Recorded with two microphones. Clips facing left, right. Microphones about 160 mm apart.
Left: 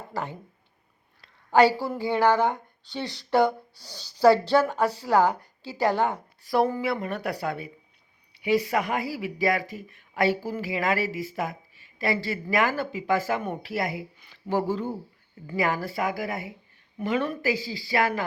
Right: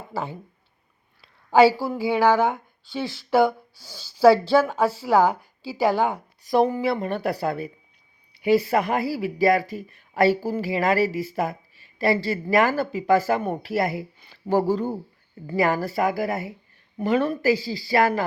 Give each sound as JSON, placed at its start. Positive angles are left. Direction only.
{"t": 1.2, "sound": "a woman's voice", "side_deg": -10}
{"t": 6.4, "sound": "speech", "side_deg": -20}
{"t": 6.8, "sound": "speech", "side_deg": -30}